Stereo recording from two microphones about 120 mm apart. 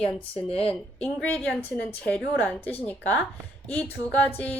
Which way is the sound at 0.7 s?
10° left (ahead or behind).